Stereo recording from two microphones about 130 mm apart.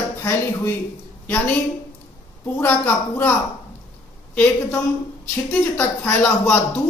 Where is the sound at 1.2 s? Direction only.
15° left (ahead or behind).